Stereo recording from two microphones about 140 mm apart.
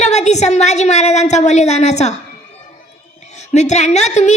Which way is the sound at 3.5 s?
55° left (ahead or behind).